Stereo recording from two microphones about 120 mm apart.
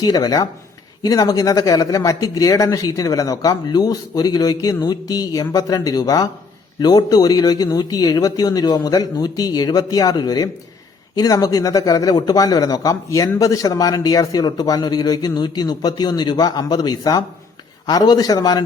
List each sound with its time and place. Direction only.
0.0 s speech: 30° left (ahead or behind)